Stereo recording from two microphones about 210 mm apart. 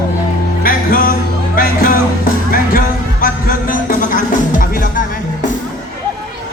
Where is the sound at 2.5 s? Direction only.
40° left (ahead or behind).